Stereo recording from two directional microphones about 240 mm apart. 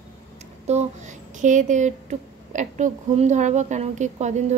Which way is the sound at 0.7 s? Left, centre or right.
Right.